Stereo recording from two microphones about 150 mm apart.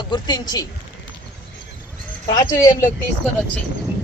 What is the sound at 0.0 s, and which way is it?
Speech, 30° left (ahead or behind).